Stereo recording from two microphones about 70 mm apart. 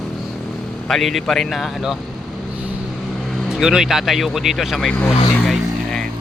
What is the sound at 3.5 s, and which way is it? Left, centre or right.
Speech, centre.